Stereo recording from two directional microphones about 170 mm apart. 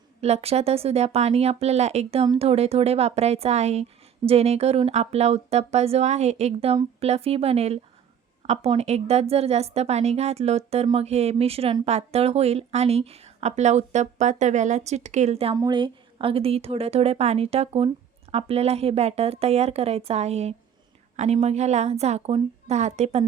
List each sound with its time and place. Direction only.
0.2 s a woman's voice: 40° right (ahead or behind)
15.5 s a woman's voice: 25° right (ahead or behind)